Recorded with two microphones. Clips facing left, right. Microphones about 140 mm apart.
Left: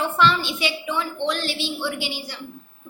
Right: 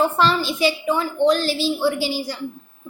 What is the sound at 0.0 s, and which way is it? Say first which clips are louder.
A woman's voice: right 2 dB; 40° right (ahead or behind).